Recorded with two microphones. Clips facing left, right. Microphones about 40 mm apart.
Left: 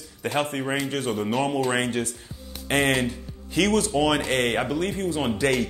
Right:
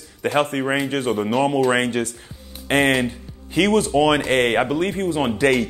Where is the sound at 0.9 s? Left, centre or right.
Right.